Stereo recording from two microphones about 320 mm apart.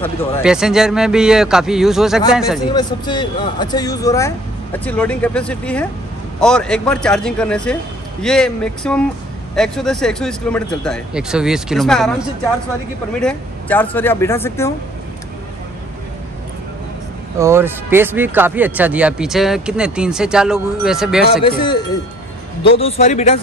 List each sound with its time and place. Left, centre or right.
0.4 s speech: centre
2.7 s speech: centre
13.2 s speech: centre
17.4 s speech: centre
21.3 s speech: centre
22.8 s a man's voice: centre